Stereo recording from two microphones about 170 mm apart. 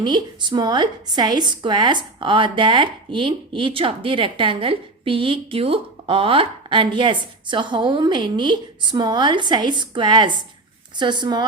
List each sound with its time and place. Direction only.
0.0 s a woman's voice: 25° right (ahead or behind)